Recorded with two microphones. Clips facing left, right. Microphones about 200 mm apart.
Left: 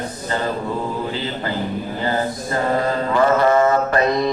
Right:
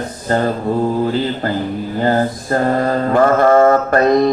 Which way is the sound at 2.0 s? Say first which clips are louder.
Right 7 dB; 50° right (ahead or behind).